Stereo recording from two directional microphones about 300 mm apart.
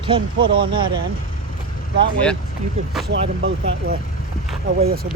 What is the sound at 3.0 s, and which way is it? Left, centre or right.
Speech, right.